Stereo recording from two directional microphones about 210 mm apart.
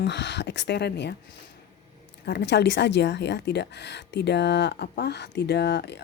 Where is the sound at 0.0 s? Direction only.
55° left (ahead or behind).